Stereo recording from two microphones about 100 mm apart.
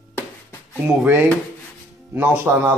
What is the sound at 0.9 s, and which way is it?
Speech, 15° right (ahead or behind).